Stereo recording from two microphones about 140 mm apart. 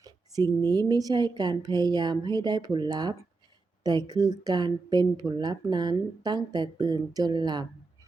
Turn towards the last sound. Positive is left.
turn(degrees=-30)  # may be behind; listen again after turning